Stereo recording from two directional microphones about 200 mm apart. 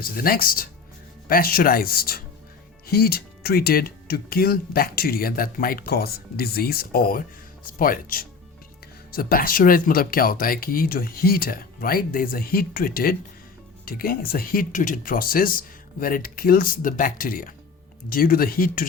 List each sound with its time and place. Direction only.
0.0 s speech: 45° left (ahead or behind)